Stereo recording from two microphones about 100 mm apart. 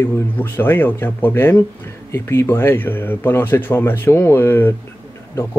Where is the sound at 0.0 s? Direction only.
20° left (ahead or behind).